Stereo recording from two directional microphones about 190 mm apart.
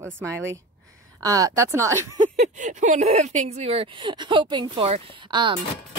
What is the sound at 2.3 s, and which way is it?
Speech, 40° right (ahead or behind).